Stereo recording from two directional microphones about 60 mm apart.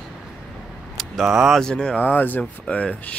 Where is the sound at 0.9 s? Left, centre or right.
Centre.